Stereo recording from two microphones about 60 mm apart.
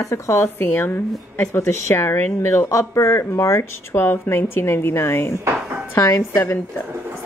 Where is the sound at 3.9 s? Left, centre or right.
Left.